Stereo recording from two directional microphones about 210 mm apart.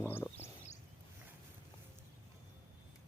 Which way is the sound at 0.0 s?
10° left (ahead or behind).